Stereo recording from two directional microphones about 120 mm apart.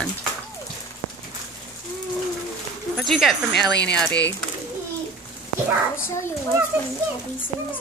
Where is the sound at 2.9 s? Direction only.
Centre (ahead or behind).